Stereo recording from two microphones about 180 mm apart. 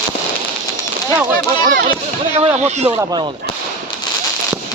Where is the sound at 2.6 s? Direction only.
35° right (ahead or behind).